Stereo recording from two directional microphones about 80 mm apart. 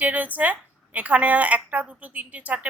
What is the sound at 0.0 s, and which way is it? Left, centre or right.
A woman's voice, centre.